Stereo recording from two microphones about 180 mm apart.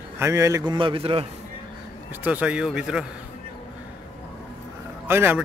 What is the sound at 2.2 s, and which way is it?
Mantra, 10° right (ahead or behind).